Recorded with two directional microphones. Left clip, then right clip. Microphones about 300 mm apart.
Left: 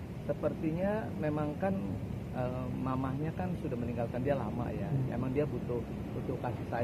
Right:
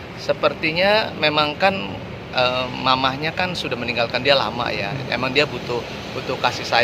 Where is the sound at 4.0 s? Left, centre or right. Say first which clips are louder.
Right 17 dB; centre.